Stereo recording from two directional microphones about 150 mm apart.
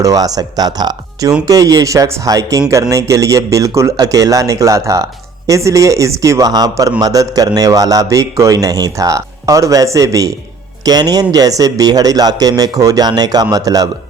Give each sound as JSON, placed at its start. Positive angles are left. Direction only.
{"t": 0.0, "sound": "a man's voice", "side_deg": -25}